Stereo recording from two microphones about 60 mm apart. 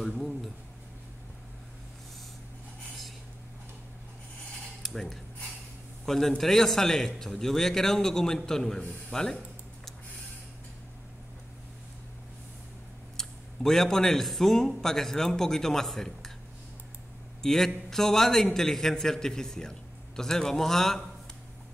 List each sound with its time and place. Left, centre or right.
0.0 s a sound: centre
4.8 s a man's voice: centre
13.2 s a man's voice: centre
17.4 s a man's voice: centre